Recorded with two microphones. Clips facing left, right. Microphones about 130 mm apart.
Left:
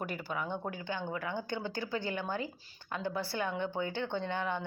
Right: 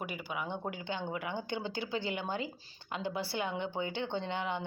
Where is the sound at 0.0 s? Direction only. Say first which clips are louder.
Left 1 dB; 15° right (ahead or behind).